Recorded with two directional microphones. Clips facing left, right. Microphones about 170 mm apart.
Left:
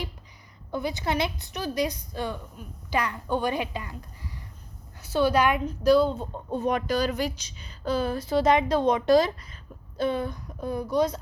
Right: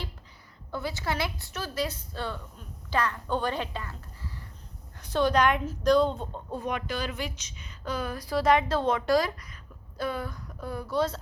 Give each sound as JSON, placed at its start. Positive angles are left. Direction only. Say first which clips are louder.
{"t": 0.7, "sound": "a woman's voice", "louder": "left 4 dB", "side_deg": 20}
{"t": 6.7, "sound": "a woman's voice", "louder": "left 7 dB", "side_deg": 40}